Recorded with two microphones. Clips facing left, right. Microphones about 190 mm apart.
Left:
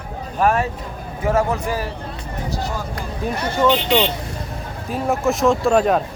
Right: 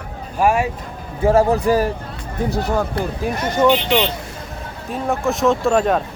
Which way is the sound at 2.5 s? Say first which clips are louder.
Right 6 dB; 60° right (ahead or behind).